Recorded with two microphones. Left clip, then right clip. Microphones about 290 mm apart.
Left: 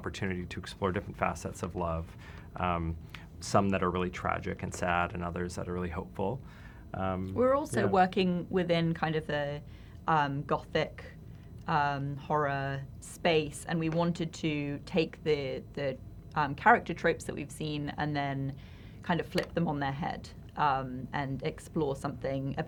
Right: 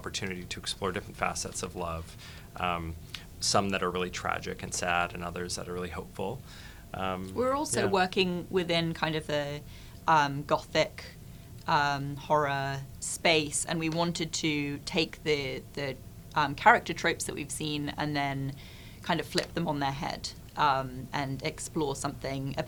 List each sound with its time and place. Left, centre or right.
0.0 s speech: centre
6.9 s speech: centre
7.3 s speech: right